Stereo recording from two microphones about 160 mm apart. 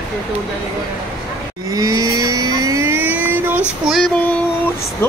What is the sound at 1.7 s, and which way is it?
Vehicle, 20° right (ahead or behind).